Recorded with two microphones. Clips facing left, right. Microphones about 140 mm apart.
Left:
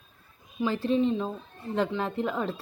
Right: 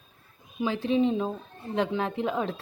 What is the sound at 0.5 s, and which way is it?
A woman's voice, centre (ahead or behind).